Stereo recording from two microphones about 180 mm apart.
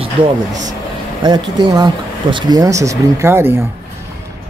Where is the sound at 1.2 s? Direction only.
25° right (ahead or behind).